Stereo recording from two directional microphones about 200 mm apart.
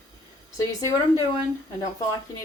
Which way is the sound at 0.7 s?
15° left (ahead or behind).